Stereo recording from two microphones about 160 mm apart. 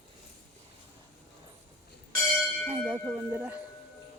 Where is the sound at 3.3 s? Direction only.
15° right (ahead or behind).